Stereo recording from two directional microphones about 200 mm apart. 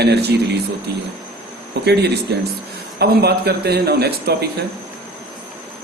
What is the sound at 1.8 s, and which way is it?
Speech, 55° right (ahead or behind).